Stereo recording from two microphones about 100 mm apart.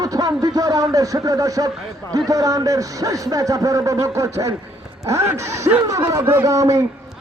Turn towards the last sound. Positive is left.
turn(degrees=-35)  # may be behind; listen again after turning